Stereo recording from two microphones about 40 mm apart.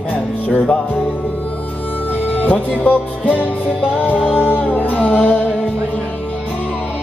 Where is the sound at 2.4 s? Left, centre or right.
Left.